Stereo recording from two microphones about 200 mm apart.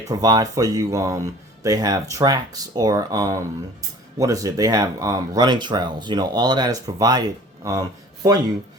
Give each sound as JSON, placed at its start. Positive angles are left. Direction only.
{"t": 0.1, "sound": "speech", "side_deg": -20}